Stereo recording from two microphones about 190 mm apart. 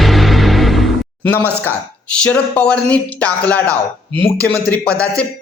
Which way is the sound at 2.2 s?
5° left (ahead or behind).